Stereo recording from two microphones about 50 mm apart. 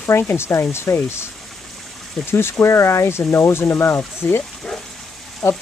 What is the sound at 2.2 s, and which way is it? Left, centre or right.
Speech, left.